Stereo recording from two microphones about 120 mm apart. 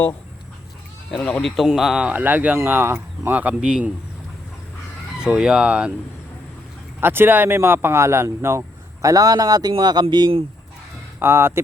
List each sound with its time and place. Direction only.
1.1 s speech: 5° left (ahead or behind); by 3.9 s 10° right (ahead or behind)
5.2 s speech: 5° right (ahead or behind)
7.0 s speech: 20° right (ahead or behind); by 10.4 s 40° right (ahead or behind)
11.2 s speech: 20° right (ahead or behind)